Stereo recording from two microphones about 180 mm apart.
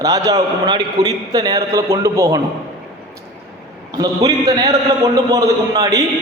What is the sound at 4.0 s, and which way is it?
A man's voice, 20° right (ahead or behind).